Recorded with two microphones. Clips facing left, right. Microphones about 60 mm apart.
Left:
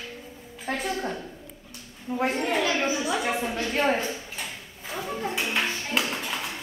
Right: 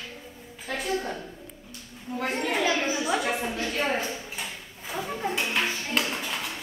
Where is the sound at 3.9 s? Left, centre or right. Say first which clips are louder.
Left 2 dB; centre.